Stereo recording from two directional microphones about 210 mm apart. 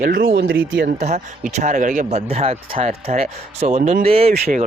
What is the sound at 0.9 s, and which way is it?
Speech, 35° right (ahead or behind).